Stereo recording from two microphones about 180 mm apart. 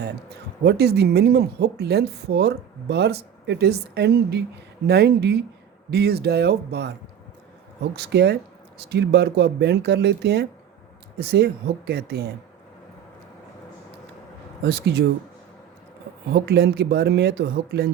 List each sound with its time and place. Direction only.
0.0 s speech: 65° right (ahead or behind)
7.9 s speech: 65° right (ahead or behind)
14.6 s speech: 65° right (ahead or behind)
16.3 s speech: 70° right (ahead or behind)